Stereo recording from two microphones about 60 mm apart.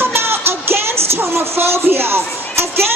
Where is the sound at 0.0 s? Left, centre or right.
Right.